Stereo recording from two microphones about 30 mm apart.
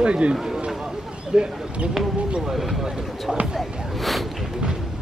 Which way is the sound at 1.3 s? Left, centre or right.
Right.